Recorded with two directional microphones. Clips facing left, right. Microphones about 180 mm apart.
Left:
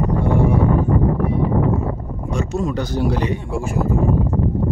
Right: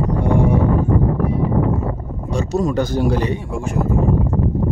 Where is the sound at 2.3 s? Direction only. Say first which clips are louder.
Right 3 dB; 35° right (ahead or behind).